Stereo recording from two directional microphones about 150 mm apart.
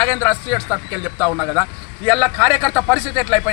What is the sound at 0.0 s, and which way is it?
A man's voice, 10° left (ahead or behind).